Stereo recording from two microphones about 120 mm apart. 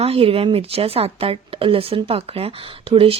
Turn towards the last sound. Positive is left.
turn(degrees=-55)  # may be behind; listen again after turning